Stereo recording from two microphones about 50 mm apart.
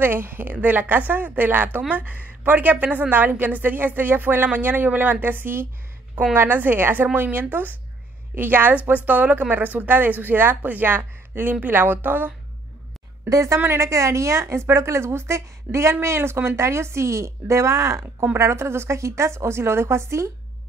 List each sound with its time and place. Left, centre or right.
0.0 s a woman's voice: right
13.7 s a woman's voice: right
15.3 s a woman's voice: right
18.4 s a woman's voice: right